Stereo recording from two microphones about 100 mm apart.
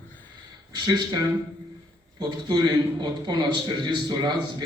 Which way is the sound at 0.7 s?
45° right (ahead or behind).